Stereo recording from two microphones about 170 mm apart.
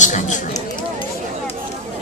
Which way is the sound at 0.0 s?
45° left (ahead or behind).